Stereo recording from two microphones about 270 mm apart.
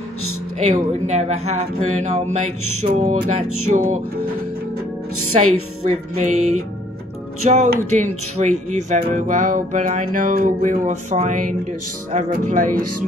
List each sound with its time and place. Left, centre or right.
0.6 s speech: right
3.4 s speech: right
5.9 s speech: right
7.4 s speech: right